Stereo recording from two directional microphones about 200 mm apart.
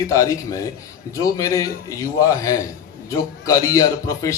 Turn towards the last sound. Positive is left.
turn(degrees=15)  # may be behind; listen again after turning